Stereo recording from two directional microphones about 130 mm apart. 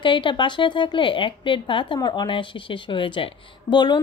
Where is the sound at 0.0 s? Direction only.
40° left (ahead or behind).